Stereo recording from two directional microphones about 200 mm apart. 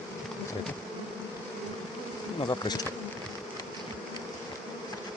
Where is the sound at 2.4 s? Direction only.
20° left (ahead or behind).